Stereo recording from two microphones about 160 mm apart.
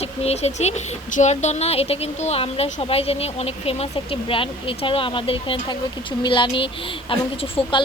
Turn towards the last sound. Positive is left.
turn(degrees=35)  # may be behind; listen again after turning